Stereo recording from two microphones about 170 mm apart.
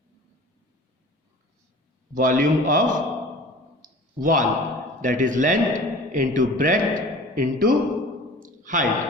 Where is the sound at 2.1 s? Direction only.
55° right (ahead or behind).